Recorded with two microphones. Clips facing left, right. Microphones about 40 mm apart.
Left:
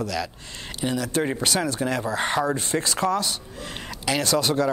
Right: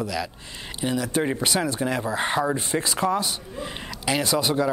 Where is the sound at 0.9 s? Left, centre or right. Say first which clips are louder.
Right 1 dB; right.